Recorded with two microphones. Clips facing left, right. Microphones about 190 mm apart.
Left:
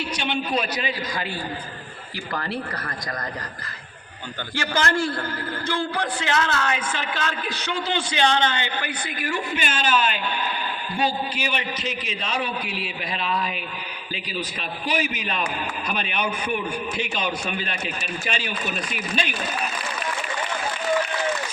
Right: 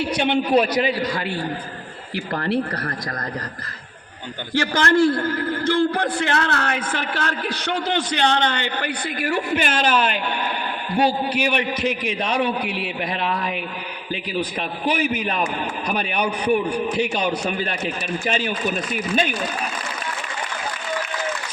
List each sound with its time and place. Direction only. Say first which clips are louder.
0.0 s a man's voice: right 7 dB; 60° right (ahead or behind)
4.6 s a man's voice: right 6 dB; 60° right (ahead or behind)
15.9 s a man's voice: right 4 dB; 40° right (ahead or behind)